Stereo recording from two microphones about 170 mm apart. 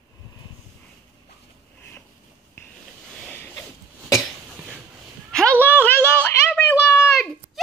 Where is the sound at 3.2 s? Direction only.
10° left (ahead or behind).